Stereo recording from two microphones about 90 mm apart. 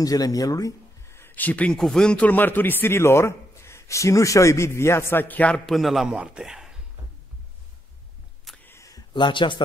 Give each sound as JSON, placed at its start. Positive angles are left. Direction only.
{"t": 0.0, "sound": "a man's voice", "side_deg": 45}
{"t": 5.7, "sound": "a man's voice", "side_deg": 0}
{"t": 8.6, "sound": "a sound", "side_deg": 35}
{"t": 9.1, "sound": "a man's voice", "side_deg": 65}